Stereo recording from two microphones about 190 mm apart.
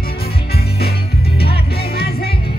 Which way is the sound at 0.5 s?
55° left (ahead or behind).